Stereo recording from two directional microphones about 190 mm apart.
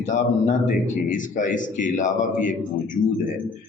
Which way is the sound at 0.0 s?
40° left (ahead or behind).